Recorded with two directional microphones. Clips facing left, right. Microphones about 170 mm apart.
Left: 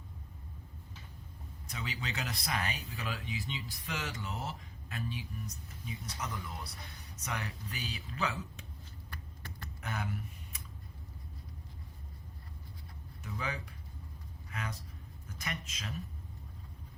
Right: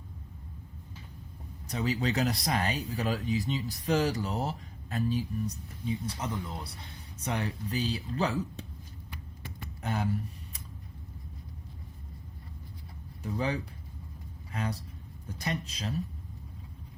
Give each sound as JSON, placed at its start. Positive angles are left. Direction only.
{"t": 1.6, "sound": "speech", "side_deg": -35}
{"t": 9.8, "sound": "speech", "side_deg": -35}
{"t": 13.2, "sound": "speech", "side_deg": -35}